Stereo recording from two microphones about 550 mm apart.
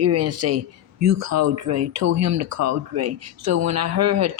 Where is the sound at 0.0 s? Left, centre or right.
Right.